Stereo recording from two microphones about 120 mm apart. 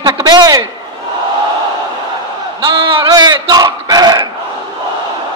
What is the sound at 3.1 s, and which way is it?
Speech, 35° right (ahead or behind).